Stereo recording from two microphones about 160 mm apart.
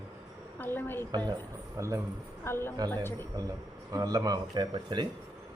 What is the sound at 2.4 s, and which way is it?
Speech, 15° left (ahead or behind).